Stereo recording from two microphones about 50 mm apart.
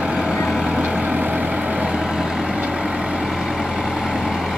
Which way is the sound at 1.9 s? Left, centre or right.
Centre.